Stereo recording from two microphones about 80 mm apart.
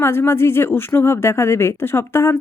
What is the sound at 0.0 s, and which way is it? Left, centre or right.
A woman's voice, left.